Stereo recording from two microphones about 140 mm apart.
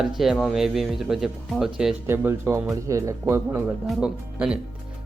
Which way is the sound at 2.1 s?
15° right (ahead or behind).